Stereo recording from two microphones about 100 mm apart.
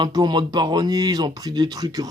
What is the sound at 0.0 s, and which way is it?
A man's voice, 45° right (ahead or behind).